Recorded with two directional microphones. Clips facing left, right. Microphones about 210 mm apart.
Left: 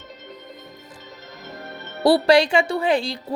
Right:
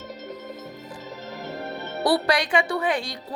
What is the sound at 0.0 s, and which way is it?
Music, 40° right (ahead or behind).